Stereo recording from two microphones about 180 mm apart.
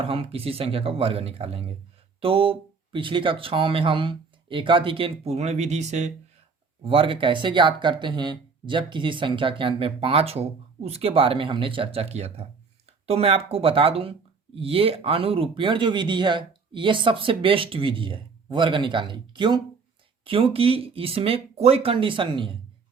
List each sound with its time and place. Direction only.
0.0 s speech: 30° right (ahead or behind)